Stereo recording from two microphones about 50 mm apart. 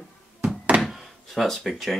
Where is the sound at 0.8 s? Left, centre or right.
Centre.